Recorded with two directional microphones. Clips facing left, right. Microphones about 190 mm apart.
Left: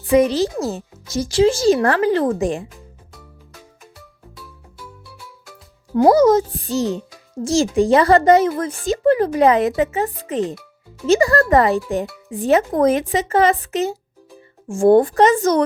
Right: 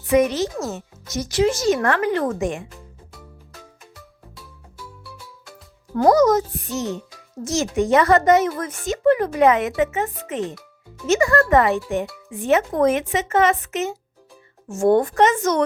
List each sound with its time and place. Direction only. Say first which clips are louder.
0.0 s a woman's voice: left 3 dB; 30° left (ahead or behind)
6.0 s a woman's voice: left 3 dB; 25° left (ahead or behind)